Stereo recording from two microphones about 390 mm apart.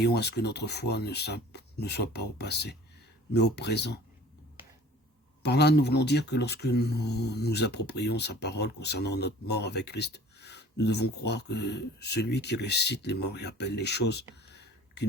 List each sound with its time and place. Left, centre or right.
0.0 s speech: left
5.4 s speech: left